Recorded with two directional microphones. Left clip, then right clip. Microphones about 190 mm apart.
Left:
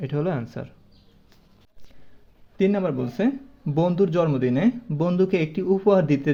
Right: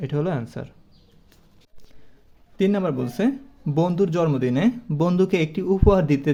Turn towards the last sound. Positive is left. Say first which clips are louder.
# even
turn(degrees=-10)  # may be behind; listen again after turning